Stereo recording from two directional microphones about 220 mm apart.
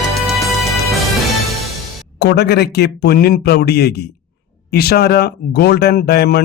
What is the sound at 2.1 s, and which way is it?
A man's voice, 50° left (ahead or behind).